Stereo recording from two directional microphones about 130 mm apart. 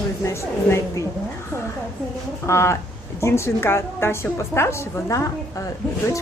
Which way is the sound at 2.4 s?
20° left (ahead or behind).